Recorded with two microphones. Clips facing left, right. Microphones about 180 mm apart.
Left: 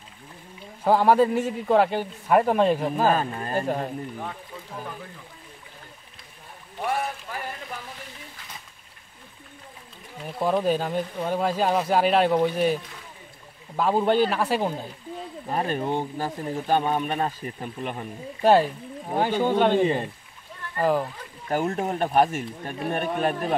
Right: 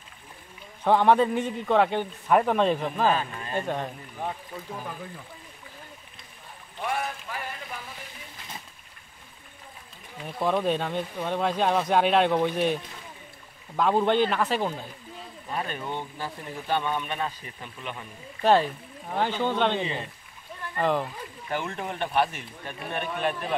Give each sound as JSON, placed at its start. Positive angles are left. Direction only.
{"t": 0.8, "sound": "a man's voice", "side_deg": 5}
{"t": 3.0, "sound": "speech", "side_deg": 45}
{"t": 3.6, "sound": "speech", "side_deg": 5}
{"t": 10.1, "sound": "a man's voice", "side_deg": 0}
{"t": 15.4, "sound": "speech", "side_deg": 40}
{"t": 18.4, "sound": "a man's voice", "side_deg": 10}
{"t": 19.7, "sound": "speech", "side_deg": 50}
{"t": 20.8, "sound": "speech", "side_deg": 5}
{"t": 21.5, "sound": "speech", "side_deg": 40}